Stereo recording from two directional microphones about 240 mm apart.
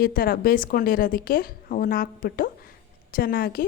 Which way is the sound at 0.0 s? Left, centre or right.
Left.